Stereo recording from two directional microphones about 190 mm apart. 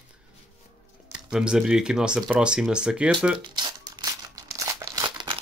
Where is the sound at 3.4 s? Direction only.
20° right (ahead or behind).